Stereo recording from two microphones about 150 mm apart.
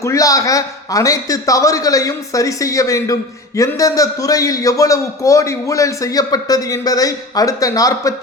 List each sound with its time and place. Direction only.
0.0 s a man's voice: 20° left (ahead or behind)